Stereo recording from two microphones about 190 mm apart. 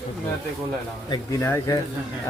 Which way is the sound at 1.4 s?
15° left (ahead or behind).